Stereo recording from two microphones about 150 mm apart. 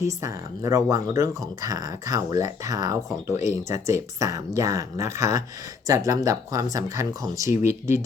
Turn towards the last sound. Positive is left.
turn(degrees=-20)  # may be behind; listen again after turning